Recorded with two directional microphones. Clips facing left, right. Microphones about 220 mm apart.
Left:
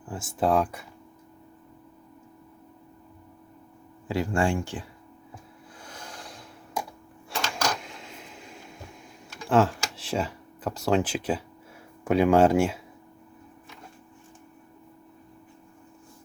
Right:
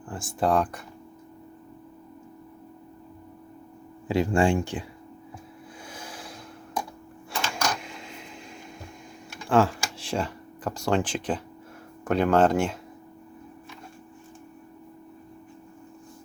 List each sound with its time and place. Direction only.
0.1 s speech: 5° left (ahead or behind)
4.1 s speech: 20° right (ahead or behind)
5.8 s a sound: 5° right (ahead or behind)
9.5 s speech: centre (ahead or behind)